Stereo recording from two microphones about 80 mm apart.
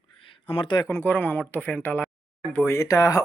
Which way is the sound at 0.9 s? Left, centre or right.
Left.